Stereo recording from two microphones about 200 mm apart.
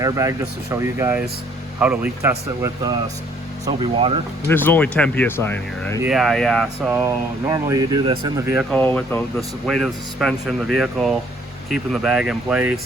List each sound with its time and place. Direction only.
0.0 s speech: 15° right (ahead or behind)
3.7 s speech: 30° right (ahead or behind)
4.4 s speech: 10° left (ahead or behind)
6.0 s speech: centre (ahead or behind)
7.0 s speech: 15° right (ahead or behind)
8.5 s speech: 5° left (ahead or behind)